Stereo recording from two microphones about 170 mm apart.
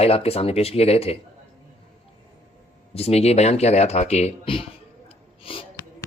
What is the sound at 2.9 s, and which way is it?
Speech, 35° left (ahead or behind).